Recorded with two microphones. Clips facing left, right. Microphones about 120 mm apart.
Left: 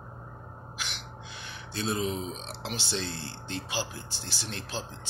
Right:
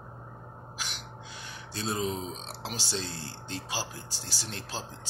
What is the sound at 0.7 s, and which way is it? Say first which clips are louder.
Speech: even; 35° right (ahead or behind).